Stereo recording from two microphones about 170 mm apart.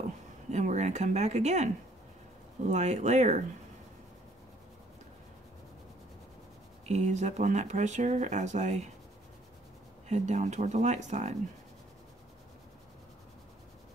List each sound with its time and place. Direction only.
0.5 s speech: 40° right (ahead or behind)
2.7 s speech: 45° right (ahead or behind)
6.9 s speech: 45° right (ahead or behind)
10.0 s speech: 45° right (ahead or behind)